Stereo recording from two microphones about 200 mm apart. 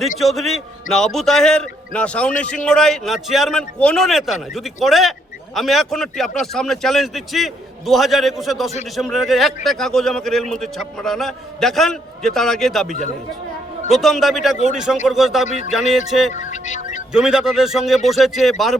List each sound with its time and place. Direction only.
0.2 s a man's voice: centre (ahead or behind)
16.3 s speech: 35° left (ahead or behind)
17.1 s a man's voice: 5° right (ahead or behind)